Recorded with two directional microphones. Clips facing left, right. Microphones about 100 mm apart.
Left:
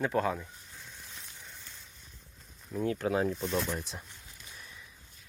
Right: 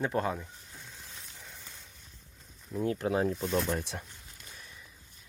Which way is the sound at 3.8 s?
65° right (ahead or behind).